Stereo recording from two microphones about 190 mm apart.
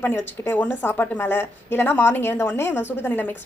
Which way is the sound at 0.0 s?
10° left (ahead or behind).